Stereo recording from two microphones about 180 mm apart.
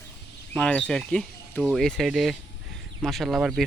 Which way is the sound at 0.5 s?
5° left (ahead or behind).